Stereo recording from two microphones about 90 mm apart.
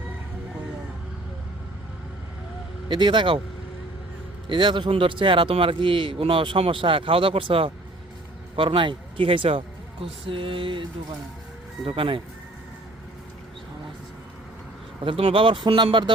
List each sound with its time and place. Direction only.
2.9 s speech: 60° right (ahead or behind)
4.4 s speech: 60° right (ahead or behind); by 7.7 s 85° right
8.5 s speech: 70° right (ahead or behind)
11.9 s speech: 75° right (ahead or behind)
15.0 s speech: 90° right; by 16.1 s 65° right (ahead or behind)